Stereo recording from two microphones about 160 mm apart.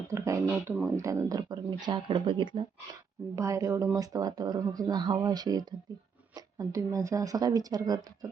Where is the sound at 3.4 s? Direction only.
20° right (ahead or behind).